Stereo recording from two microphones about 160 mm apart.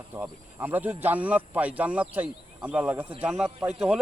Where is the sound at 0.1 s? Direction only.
10° right (ahead or behind).